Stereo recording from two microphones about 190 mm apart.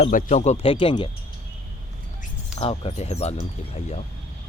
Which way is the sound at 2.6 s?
30° left (ahead or behind).